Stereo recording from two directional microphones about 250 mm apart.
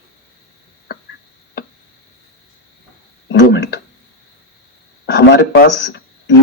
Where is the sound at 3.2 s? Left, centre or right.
Left.